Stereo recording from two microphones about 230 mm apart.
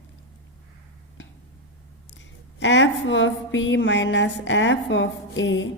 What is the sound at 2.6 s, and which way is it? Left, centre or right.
A woman's voice, left.